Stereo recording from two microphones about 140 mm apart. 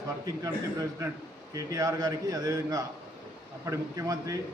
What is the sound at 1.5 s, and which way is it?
A man's voice, 25° right (ahead or behind).